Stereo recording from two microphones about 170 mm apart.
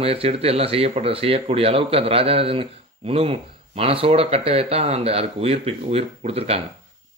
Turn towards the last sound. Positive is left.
turn(degrees=-35)  # may be behind; listen again after turning